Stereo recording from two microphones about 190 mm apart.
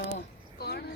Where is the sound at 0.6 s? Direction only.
55° left (ahead or behind).